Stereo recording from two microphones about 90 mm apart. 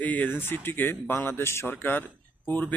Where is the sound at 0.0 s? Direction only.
20° left (ahead or behind).